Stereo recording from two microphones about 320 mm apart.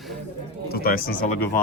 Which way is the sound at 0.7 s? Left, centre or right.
Left.